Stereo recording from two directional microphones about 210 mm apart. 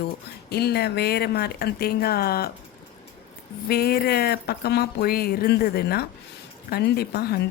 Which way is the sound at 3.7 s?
50° left (ahead or behind).